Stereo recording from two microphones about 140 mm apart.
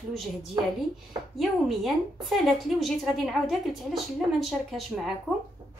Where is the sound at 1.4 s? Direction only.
Centre (ahead or behind).